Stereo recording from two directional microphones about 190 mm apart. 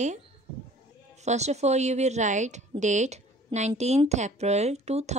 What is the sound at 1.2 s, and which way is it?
A woman's voice, 35° right (ahead or behind).